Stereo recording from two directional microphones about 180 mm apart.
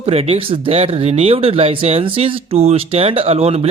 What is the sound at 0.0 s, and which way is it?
Speech, 35° right (ahead or behind).